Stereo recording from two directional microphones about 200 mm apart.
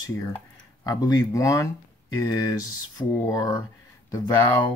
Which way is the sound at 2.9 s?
15° left (ahead or behind).